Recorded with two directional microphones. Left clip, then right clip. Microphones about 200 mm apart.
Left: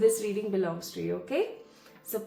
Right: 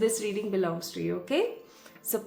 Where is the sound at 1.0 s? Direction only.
25° right (ahead or behind).